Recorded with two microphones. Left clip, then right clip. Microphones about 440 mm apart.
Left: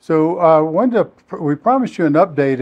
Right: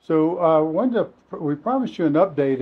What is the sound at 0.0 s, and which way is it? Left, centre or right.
Speech, left.